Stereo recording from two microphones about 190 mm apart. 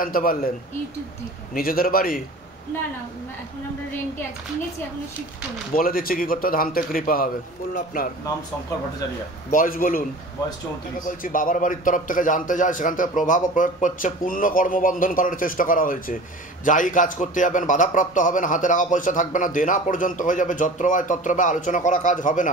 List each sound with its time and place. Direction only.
0.0 s a man's voice: 50° left (ahead or behind)
1.5 s a man's voice: 50° left (ahead or behind)
5.8 s a man's voice: 50° left (ahead or behind)
9.5 s a man's voice: 45° left (ahead or behind)
11.1 s a man's voice: 45° left (ahead or behind)